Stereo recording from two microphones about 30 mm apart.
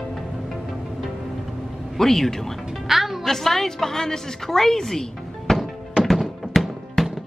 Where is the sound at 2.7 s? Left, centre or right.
Centre.